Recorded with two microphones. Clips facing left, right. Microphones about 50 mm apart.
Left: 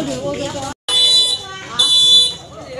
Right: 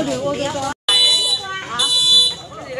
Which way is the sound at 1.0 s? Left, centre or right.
Right.